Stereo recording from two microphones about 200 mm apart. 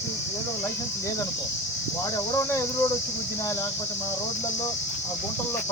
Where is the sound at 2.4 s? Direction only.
15° left (ahead or behind).